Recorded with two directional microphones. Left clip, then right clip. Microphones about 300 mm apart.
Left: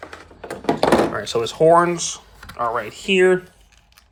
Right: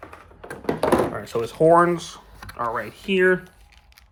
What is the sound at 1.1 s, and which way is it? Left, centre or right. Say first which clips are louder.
Speech: left 5 dB; centre.